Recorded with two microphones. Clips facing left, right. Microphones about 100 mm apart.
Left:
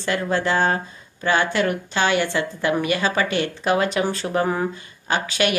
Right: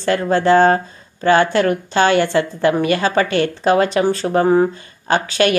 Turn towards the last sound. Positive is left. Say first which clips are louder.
# right 6 dB
turn(degrees=-40)  # may be behind; listen again after turning